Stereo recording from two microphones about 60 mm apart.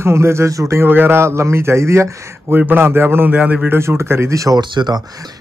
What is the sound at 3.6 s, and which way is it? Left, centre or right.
Speech, right.